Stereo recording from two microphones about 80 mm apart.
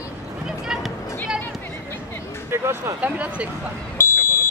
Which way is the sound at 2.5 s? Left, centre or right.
Right.